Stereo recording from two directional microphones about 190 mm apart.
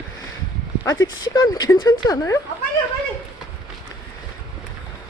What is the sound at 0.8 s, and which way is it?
Speech, 20° left (ahead or behind).